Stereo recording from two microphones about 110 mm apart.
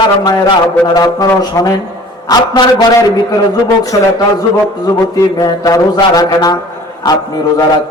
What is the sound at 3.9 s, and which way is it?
Speech, 35° left (ahead or behind).